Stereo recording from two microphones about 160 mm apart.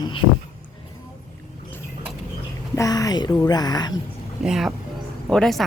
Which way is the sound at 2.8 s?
20° left (ahead or behind).